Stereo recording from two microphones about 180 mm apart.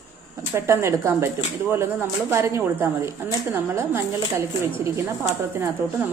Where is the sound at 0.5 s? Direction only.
15° right (ahead or behind).